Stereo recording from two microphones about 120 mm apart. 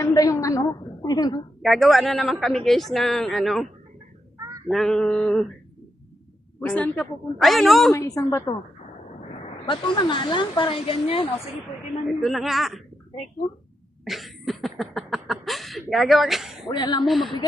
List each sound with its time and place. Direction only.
0.0 s a woman's voice: 30° left (ahead or behind)
1.6 s a woman's voice: centre (ahead or behind)
4.7 s a woman's voice: 5° left (ahead or behind)
6.6 s a woman's voice: 10° left (ahead or behind)
7.9 s a woman's voice: 25° left (ahead or behind)
9.3 s a woman's voice: 45° left (ahead or behind)
12.2 s a woman's voice: centre (ahead or behind)
14.0 s a sound: centre (ahead or behind)
16.6 s speech: 40° left (ahead or behind)
17.1 s a woman's voice: centre (ahead or behind)